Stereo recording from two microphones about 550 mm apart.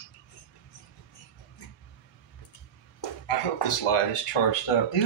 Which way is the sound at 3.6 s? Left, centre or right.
Left.